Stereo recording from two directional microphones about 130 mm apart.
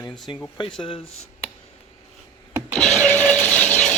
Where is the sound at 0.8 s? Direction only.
45° left (ahead or behind).